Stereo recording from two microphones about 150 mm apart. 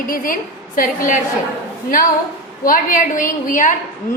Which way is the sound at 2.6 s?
65° left (ahead or behind).